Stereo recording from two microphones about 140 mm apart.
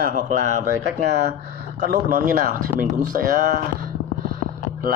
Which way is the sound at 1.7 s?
90° right.